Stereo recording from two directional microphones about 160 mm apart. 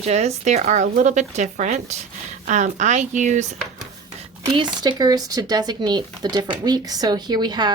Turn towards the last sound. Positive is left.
turn(degrees=-25)  # may be behind; listen again after turning